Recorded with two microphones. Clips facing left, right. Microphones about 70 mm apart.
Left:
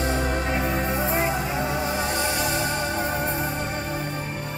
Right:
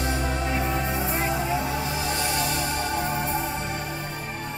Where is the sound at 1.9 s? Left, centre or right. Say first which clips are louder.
Left 2 dB; left.